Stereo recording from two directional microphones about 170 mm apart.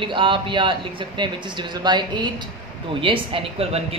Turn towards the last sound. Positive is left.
turn(degrees=-35)  # may be behind; listen again after turning